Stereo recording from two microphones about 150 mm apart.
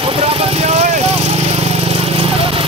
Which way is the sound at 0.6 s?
45° right (ahead or behind).